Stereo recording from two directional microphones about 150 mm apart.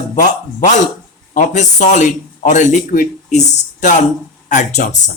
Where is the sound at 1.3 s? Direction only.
55° left (ahead or behind).